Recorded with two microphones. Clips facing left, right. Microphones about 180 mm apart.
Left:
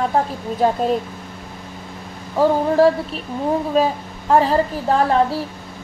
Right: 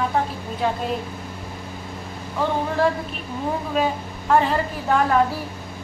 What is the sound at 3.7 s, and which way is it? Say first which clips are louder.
A woman's voice: left 4 dB; 35° left (ahead or behind).